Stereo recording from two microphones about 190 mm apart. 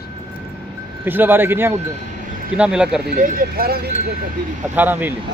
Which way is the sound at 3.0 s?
50° right (ahead or behind).